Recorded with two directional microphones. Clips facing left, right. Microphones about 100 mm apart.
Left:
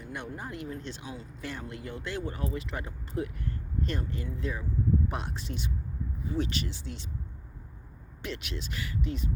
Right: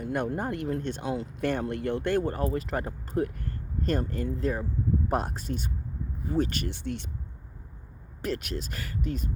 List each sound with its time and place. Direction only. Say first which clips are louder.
0.0 s speech: right 10 dB; 55° right (ahead or behind)
8.2 s speech: right 6 dB; 45° right (ahead or behind)